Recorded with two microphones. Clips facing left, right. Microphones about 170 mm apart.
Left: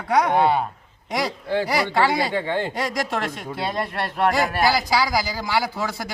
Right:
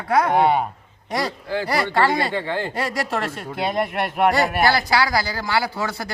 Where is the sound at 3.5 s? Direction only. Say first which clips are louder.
Right 4 dB; 20° right (ahead or behind).